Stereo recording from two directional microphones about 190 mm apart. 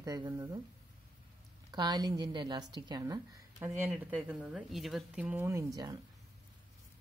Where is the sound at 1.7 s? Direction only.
20° right (ahead or behind).